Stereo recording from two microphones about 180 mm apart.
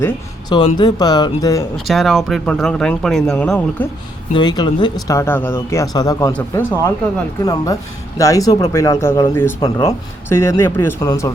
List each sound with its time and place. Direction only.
0.8 s speech: 20° left (ahead or behind)
1.7 s speech: centre (ahead or behind)
4.4 s speech: 25° left (ahead or behind)